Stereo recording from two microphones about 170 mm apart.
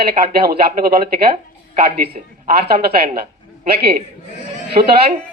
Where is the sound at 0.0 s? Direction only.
65° right (ahead or behind).